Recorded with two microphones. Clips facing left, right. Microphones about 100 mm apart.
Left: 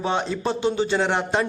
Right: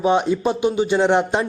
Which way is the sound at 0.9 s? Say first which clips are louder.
Right 5 dB; 15° right (ahead or behind).